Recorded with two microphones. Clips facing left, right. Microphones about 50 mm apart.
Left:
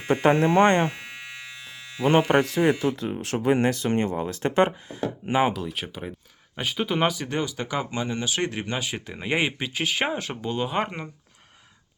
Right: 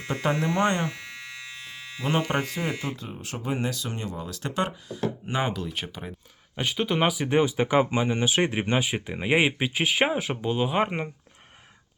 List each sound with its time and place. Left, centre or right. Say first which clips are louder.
0.1 s speech: left 7 dB; left
2.0 s speech: left 7 dB; left
3.7 s speech: left 9 dB; left
5.3 s speech: left 7 dB; centre
5.5 s speech: left 1 dB; centre
7.3 s speech: right 6 dB; right; by 10.8 s centre
10.8 s speech: right 4 dB; right